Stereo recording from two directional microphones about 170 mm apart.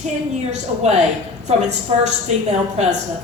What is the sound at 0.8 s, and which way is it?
A woman's voice, 40° right (ahead or behind).